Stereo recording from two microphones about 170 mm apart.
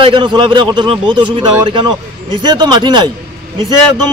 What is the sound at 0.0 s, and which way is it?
A man's voice, 30° right (ahead or behind).